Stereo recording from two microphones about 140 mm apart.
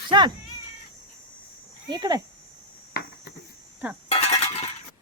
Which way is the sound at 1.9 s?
30° right (ahead or behind).